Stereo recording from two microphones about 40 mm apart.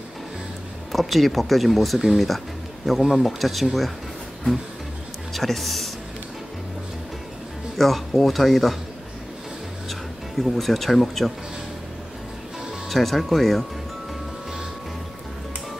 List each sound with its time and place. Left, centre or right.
0.9 s speech: centre
5.3 s speech: centre
7.7 s speech: centre
9.8 s speech: centre
12.9 s speech: centre